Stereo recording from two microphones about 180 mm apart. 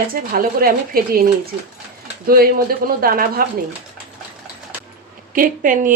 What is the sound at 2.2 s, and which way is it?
Speech, 55° right (ahead or behind).